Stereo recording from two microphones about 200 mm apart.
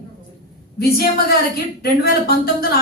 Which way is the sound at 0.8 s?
50° left (ahead or behind).